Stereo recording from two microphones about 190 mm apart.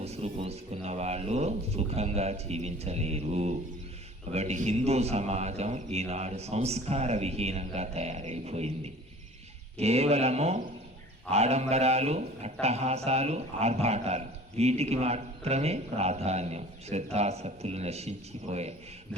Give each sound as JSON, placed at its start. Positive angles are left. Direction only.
{"t": 0.0, "sound": "a man's voice", "side_deg": -35}